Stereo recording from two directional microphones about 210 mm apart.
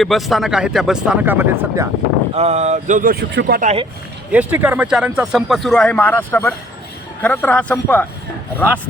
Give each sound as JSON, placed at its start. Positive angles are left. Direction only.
{"t": 0.0, "sound": "speech", "side_deg": 0}
{"t": 2.3, "sound": "speech", "side_deg": -30}
{"t": 4.3, "sound": "speech", "side_deg": -5}